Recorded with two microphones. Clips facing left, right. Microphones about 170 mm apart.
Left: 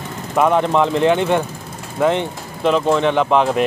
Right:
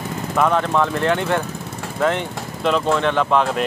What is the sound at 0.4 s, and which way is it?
Speech, 15° left (ahead or behind).